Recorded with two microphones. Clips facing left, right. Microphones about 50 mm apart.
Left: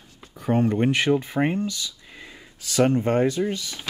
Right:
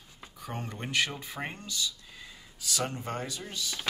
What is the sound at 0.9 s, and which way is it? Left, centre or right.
Speech, centre.